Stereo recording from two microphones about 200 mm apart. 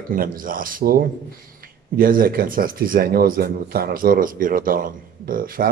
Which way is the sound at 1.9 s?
45° right (ahead or behind).